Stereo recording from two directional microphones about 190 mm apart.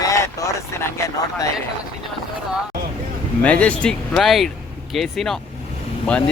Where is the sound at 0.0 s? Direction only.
15° left (ahead or behind).